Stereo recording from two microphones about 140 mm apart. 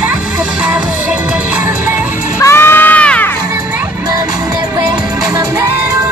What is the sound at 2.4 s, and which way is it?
Crowd, 15° left (ahead or behind).